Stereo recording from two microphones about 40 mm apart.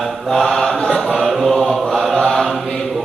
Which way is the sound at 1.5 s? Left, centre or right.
Centre.